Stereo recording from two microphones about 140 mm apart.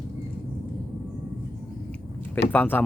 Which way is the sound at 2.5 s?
15° left (ahead or behind).